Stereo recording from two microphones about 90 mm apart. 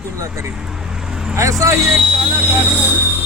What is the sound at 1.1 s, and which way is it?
Vehicle, 10° right (ahead or behind).